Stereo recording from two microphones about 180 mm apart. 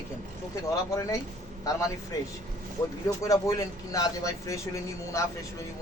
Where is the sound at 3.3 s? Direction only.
20° left (ahead or behind).